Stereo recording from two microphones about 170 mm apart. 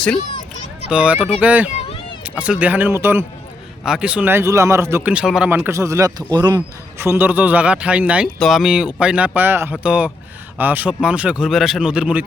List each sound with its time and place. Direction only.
0.9 s speech: 5° right (ahead or behind)
1.7 s a sound: 35° left (ahead or behind)
2.2 s speech: 5° right (ahead or behind); by 6.6 s 25° right (ahead or behind)
7.0 s speech: 15° right (ahead or behind)